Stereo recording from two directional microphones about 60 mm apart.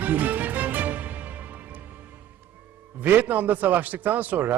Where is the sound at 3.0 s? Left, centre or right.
Right.